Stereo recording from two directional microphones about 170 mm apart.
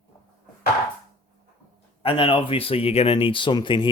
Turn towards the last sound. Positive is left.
turn(degrees=30)  # may be behind; listen again after turning